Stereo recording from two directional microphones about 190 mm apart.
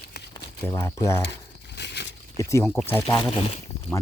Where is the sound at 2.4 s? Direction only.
15° left (ahead or behind).